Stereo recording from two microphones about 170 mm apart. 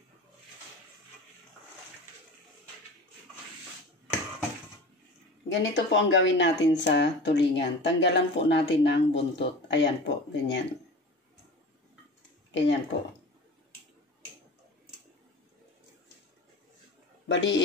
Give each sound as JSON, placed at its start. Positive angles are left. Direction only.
{"t": 5.5, "sound": "speech", "side_deg": 90}
{"t": 12.4, "sound": "a sound", "side_deg": 90}
{"t": 17.3, "sound": "speech", "side_deg": 90}